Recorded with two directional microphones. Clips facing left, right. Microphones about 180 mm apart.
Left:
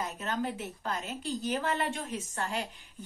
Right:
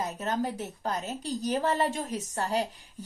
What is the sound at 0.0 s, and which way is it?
A woman's voice, 40° right (ahead or behind).